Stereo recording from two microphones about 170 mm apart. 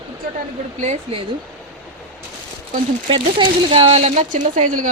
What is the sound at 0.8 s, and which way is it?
Speech, 40° right (ahead or behind).